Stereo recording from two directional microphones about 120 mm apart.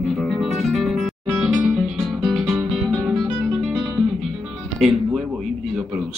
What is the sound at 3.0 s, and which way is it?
Music, centre (ahead or behind).